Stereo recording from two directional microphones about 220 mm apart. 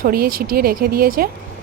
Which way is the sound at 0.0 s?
40° right (ahead or behind).